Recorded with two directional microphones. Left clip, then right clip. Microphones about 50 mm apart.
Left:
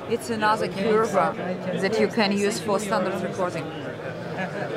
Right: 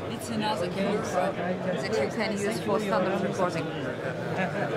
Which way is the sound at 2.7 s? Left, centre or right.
Left.